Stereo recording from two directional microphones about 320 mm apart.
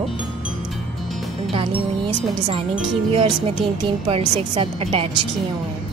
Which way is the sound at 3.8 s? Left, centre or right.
Centre.